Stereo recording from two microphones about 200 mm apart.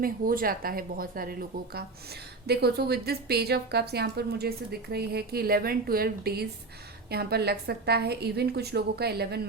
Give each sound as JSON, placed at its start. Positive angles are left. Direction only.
{"t": 0.0, "sound": "a woman's voice", "side_deg": -45}